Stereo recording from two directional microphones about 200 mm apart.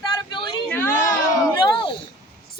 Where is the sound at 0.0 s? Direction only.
20° left (ahead or behind).